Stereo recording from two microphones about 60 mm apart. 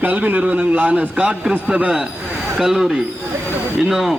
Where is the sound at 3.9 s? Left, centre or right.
Centre.